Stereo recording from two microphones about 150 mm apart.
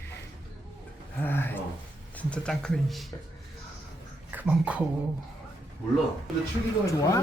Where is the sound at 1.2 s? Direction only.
15° left (ahead or behind).